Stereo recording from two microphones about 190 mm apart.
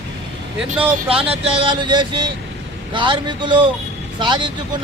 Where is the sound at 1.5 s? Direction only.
25° right (ahead or behind).